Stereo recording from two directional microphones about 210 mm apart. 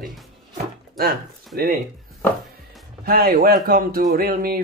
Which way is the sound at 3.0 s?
45° right (ahead or behind).